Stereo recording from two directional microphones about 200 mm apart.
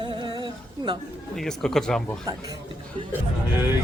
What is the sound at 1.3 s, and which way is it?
Speech, centre (ahead or behind).